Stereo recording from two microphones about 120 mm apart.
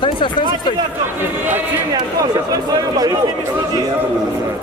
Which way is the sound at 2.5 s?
30° right (ahead or behind).